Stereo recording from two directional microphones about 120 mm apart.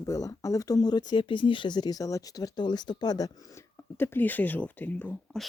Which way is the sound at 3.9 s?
20° left (ahead or behind).